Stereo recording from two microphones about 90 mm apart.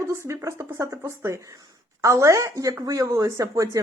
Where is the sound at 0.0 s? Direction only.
30° right (ahead or behind).